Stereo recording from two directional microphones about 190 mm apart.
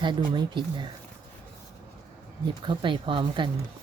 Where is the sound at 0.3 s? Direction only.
25° right (ahead or behind).